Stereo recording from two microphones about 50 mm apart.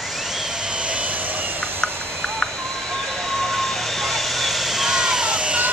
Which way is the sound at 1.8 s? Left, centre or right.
Centre.